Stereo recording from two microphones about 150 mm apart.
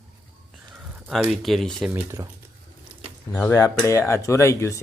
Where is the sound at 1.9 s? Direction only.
15° right (ahead or behind).